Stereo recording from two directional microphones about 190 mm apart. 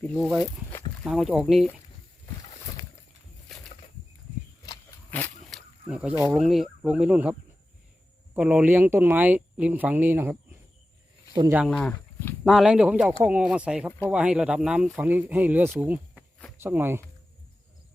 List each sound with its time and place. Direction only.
0.0 s speech: 10° left (ahead or behind)
1.0 s speech: 5° right (ahead or behind)
5.1 s a sound: 10° left (ahead or behind)
5.9 s speech: 5° right (ahead or behind)
11.7 s speech: 5° left (ahead or behind); by 17.0 s 10° right (ahead or behind)